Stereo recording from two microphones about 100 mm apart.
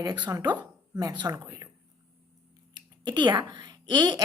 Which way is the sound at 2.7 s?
45° right (ahead or behind).